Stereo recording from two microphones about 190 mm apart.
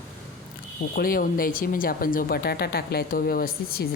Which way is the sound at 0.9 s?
50° left (ahead or behind).